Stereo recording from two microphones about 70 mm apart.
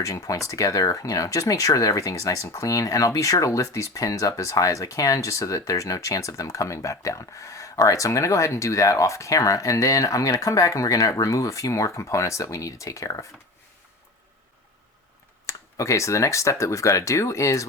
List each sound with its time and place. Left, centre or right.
0.0 s speech: left
15.4 s speech: left